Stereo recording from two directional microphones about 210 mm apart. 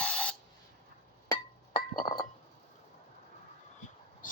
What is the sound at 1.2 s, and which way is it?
Chink, 20° left (ahead or behind).